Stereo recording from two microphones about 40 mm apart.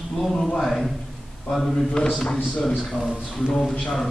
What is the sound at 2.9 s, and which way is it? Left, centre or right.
Speech, centre.